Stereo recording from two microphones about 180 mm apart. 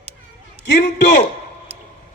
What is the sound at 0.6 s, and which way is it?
Speech, 75° left (ahead or behind).